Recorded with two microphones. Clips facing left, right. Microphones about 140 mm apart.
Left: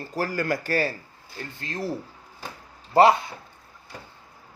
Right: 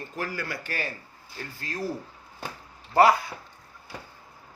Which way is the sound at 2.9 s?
25° left (ahead or behind).